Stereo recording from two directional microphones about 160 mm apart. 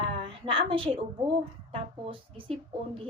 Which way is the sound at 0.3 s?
35° right (ahead or behind).